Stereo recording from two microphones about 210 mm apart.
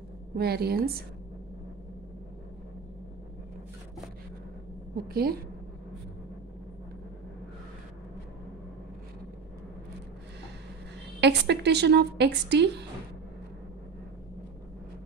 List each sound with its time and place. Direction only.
0.4 s a woman's voice: 50° right (ahead or behind)
4.9 s a woman's voice: 45° right (ahead or behind)
11.1 s a woman's voice: 55° right (ahead or behind)